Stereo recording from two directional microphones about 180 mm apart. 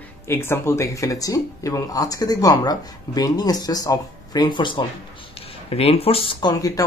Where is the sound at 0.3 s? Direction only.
15° left (ahead or behind); by 6.5 s 30° left (ahead or behind).